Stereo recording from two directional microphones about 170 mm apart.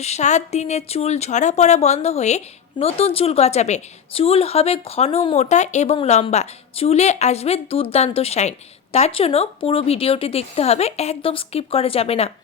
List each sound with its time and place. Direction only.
0.0 s speech: 40° left (ahead or behind)